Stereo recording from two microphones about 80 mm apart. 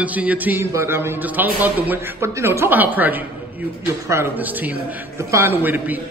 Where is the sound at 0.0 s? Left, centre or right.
Centre.